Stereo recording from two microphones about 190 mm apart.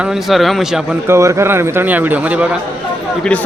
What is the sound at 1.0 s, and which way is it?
A man's voice, 15° right (ahead or behind).